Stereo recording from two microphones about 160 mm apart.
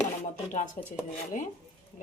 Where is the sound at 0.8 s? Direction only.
60° left (ahead or behind).